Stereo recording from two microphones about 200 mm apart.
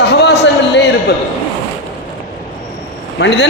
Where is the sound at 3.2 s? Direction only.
60° left (ahead or behind).